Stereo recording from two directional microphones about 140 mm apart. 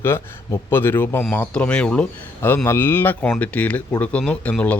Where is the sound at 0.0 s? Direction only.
15° left (ahead or behind).